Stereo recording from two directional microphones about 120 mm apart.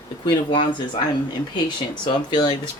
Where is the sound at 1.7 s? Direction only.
40° left (ahead or behind).